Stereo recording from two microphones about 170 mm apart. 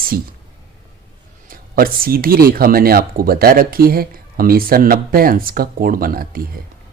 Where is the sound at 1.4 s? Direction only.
60° right (ahead or behind).